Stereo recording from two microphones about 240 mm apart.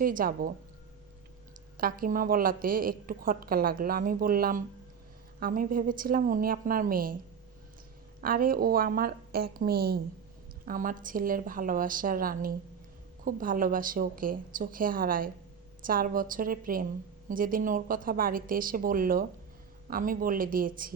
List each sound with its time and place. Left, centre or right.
0.0 s a woman's voice: right
1.8 s a woman's voice: right
8.2 s a woman's voice: right